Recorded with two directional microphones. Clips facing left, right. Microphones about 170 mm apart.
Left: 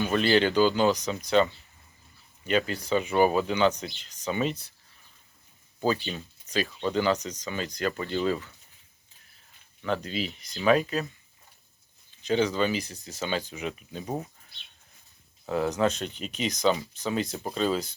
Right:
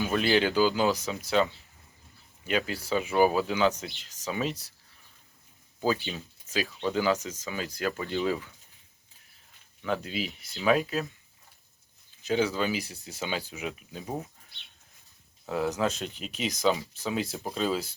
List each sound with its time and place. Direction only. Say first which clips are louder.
0.0 s speech: left 2 dB; 5° right (ahead or behind)
2.5 s speech: left 3 dB; 5° right (ahead or behind)
5.8 s speech: left 1 dB; 5° right (ahead or behind)
9.8 s speech: left 1 dB; 5° right (ahead or behind)
12.2 s speech: left 2 dB; 5° right (ahead or behind)
15.4 s speech: left 3 dB; centre (ahead or behind)